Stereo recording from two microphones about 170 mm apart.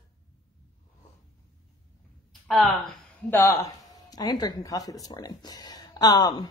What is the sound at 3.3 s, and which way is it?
Speech, 15° left (ahead or behind).